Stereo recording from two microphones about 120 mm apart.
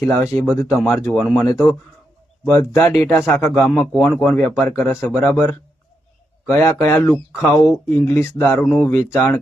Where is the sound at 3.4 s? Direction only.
5° left (ahead or behind).